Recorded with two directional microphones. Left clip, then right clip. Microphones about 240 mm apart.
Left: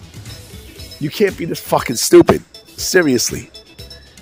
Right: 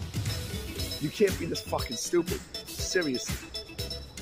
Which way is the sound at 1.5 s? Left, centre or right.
Left.